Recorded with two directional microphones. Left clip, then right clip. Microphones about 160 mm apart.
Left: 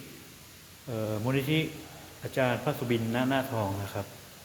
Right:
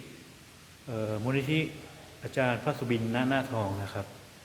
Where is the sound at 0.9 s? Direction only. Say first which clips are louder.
Left 1 dB; 10° left (ahead or behind).